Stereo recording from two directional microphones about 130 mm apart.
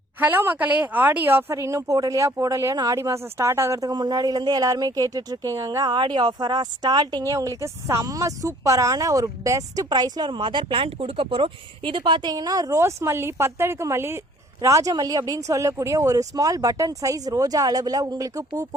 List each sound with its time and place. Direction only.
0.2 s speech: 15° right (ahead or behind)